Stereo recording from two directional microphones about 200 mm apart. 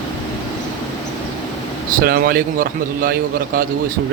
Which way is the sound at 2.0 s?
50° right (ahead or behind).